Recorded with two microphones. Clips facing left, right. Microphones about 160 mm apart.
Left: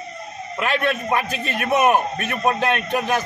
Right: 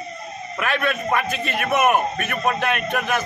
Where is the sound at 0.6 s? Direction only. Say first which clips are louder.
Left 2 dB; 30° left (ahead or behind).